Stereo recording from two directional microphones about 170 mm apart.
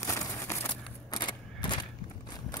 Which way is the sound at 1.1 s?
25° left (ahead or behind).